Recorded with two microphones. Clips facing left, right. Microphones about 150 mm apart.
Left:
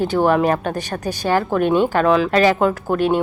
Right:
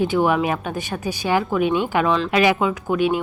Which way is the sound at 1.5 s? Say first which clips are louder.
Left 4 dB; 45° left (ahead or behind).